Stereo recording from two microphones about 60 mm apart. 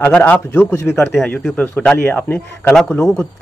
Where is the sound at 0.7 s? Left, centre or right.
Left.